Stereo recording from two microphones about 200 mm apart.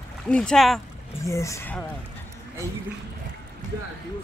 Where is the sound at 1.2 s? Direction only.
15° left (ahead or behind).